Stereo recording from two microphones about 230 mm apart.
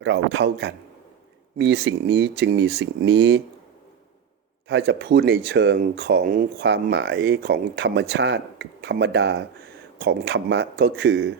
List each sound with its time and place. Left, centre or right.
0.0 s speech: right
4.7 s speech: right